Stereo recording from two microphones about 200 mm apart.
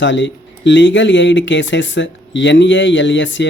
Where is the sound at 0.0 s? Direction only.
65° left (ahead or behind).